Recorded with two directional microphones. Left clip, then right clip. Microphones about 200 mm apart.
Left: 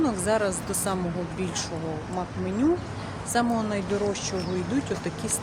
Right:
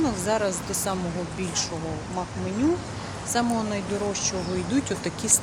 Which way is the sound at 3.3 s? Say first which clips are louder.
Even; centre (ahead or behind).